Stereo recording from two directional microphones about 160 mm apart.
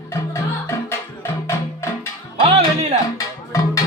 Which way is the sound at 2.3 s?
45° right (ahead or behind).